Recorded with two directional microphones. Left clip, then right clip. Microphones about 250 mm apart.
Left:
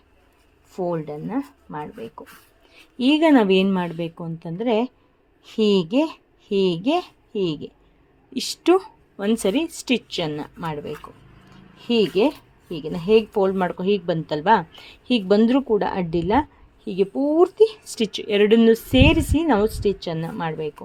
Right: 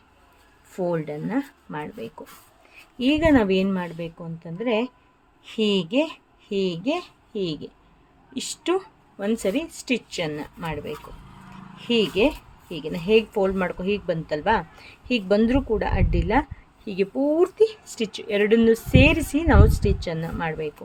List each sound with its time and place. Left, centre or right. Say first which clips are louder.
0.7 s speech: even; centre
3.0 s a woman's voice: left 3 dB; centre